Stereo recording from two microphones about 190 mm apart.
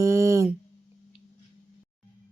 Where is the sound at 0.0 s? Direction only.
15° right (ahead or behind).